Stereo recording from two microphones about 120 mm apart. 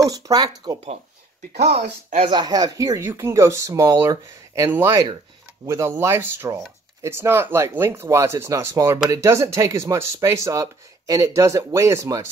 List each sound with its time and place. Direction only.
0.0 s speech: 30° right (ahead or behind)
2.2 s speech: 35° right (ahead or behind)